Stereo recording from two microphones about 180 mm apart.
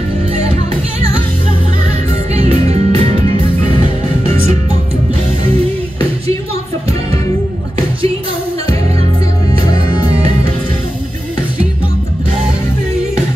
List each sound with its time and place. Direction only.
2.3 s music: 35° right (ahead or behind)